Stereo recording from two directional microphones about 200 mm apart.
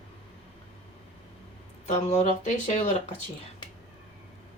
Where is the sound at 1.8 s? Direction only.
35° left (ahead or behind).